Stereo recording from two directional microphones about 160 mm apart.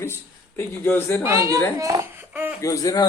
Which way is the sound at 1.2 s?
20° right (ahead or behind).